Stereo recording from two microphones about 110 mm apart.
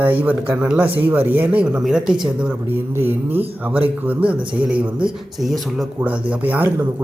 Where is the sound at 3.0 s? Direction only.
20° right (ahead or behind).